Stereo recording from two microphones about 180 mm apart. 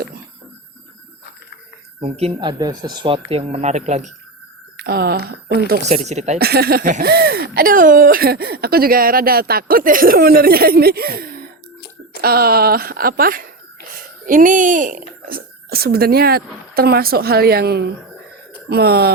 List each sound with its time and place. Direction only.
2.0 s speech: 35° right (ahead or behind)
4.8 s speech: 60° right (ahead or behind)
5.8 s speech: 40° right (ahead or behind)
6.4 s speech: 60° right (ahead or behind)